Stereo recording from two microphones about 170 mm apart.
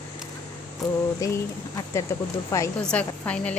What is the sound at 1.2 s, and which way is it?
Speech, 20° left (ahead or behind).